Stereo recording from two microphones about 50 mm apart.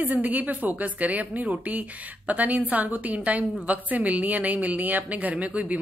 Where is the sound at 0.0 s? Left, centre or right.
Right.